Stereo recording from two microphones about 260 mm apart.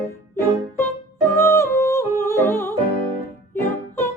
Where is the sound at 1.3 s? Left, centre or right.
Centre.